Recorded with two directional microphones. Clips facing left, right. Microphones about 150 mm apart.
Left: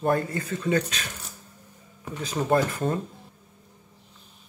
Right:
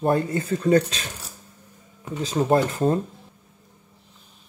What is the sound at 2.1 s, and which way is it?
Speech, 30° right (ahead or behind).